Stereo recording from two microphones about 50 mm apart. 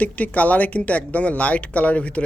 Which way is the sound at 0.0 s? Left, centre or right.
Left.